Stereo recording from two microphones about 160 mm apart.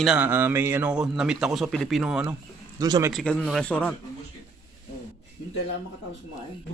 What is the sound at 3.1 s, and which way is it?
Speech, 5° left (ahead or behind).